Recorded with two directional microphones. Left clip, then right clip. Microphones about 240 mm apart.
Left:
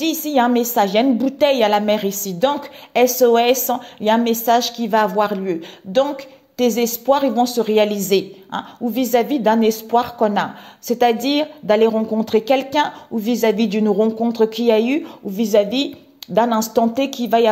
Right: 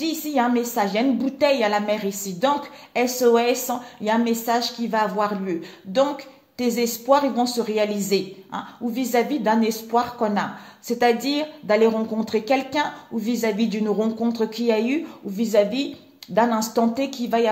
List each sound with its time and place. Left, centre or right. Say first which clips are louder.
0.0 s a woman's voice: left 5 dB; left